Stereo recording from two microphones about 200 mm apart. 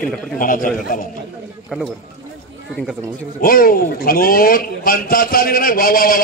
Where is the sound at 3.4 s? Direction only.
45° left (ahead or behind).